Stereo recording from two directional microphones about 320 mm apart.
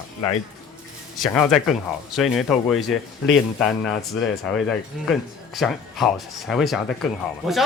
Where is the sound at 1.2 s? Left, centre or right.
Centre.